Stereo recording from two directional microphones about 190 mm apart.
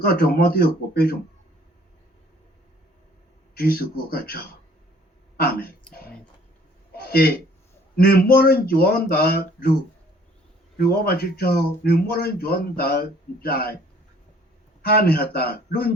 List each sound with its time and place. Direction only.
0.0 s speech: 55° left (ahead or behind)
3.5 s speech: 55° left (ahead or behind)
6.9 s a sound: 55° left (ahead or behind)
7.9 s speech: 55° left (ahead or behind)
10.8 s speech: 55° left (ahead or behind)
14.8 s speech: 55° left (ahead or behind)